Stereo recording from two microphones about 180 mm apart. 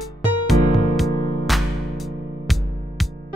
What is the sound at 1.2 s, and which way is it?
Music, 30° left (ahead or behind).